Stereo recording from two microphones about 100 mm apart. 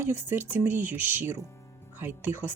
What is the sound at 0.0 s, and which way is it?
Speech, 20° right (ahead or behind).